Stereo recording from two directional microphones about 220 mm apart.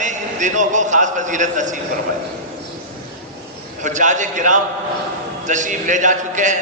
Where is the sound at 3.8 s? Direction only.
35° right (ahead or behind).